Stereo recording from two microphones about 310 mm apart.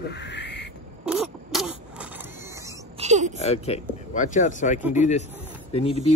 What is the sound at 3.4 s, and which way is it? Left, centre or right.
Speech, left.